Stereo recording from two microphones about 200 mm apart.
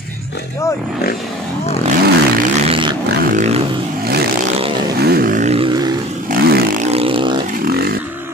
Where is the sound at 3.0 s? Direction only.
35° right (ahead or behind).